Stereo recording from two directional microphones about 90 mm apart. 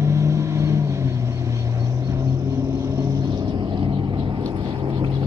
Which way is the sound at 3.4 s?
60° right (ahead or behind).